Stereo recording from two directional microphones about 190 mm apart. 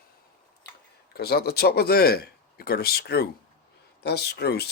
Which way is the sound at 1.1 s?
55° left (ahead or behind).